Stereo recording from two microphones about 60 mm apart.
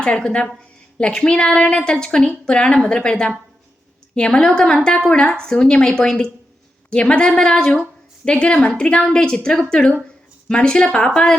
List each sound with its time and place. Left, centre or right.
0.0 s a woman's voice: centre